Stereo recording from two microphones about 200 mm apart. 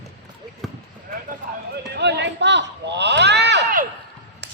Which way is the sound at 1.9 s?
60° right (ahead or behind).